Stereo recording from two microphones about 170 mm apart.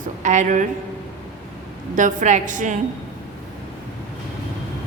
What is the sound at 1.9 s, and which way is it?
Speech, 50° right (ahead or behind).